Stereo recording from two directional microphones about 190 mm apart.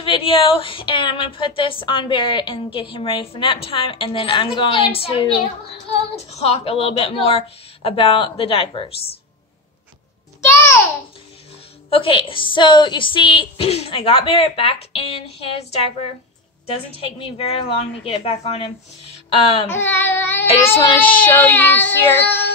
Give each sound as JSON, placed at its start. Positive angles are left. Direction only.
{"t": 0.0, "sound": "a woman's voice", "side_deg": 30}
{"t": 10.4, "sound": "babbling", "side_deg": 10}
{"t": 11.9, "sound": "a woman's voice", "side_deg": 25}
{"t": 19.7, "sound": "child singing", "side_deg": 15}
{"t": 20.7, "sound": "a woman's voice", "side_deg": 25}
{"t": 21.3, "sound": "child singing", "side_deg": 10}